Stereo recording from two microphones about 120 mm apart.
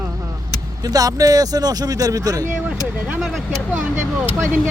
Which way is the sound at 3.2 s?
Centre (ahead or behind).